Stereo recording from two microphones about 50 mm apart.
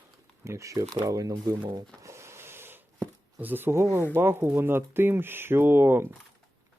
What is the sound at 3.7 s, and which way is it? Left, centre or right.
Speech, right.